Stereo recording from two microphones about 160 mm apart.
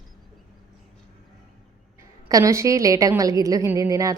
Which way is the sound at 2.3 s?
20° right (ahead or behind).